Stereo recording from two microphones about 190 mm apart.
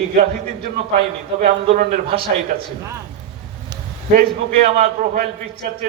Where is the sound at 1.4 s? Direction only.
45° right (ahead or behind).